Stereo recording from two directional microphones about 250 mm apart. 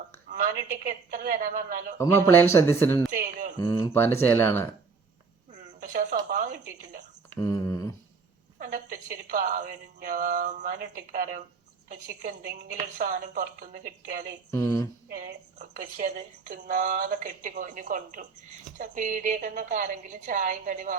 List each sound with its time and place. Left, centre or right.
0.3 s a woman's voice: right
2.0 s speech: centre
3.1 s a woman's voice: right
3.6 s speech: centre
5.5 s a woman's voice: right
7.3 s speech: centre
8.5 s a woman's voice: right